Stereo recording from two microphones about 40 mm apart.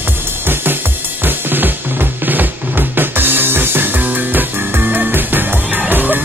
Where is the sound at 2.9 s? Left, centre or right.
Right.